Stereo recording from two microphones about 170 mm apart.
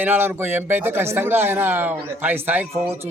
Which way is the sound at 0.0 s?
10° right (ahead or behind).